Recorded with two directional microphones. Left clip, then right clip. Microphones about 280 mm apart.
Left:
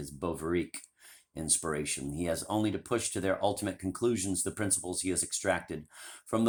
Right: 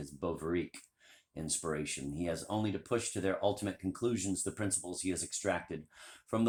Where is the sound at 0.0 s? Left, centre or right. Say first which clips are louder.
Left 3 dB; left.